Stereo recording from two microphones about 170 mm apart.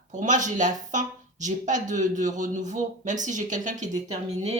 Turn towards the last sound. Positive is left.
turn(degrees=-45)  # may be behind; listen again after turning